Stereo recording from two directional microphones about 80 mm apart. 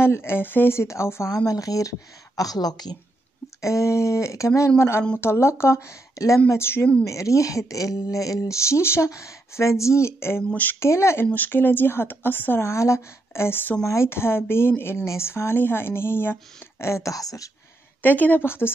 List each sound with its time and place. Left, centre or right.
0.0 s a woman's voice: left
1.3 s speech: left
3.6 s a woman's voice: left
10.5 s speech: left
10.8 s a woman's voice: left
11.3 s a woman's voice: left
18.0 s speech: left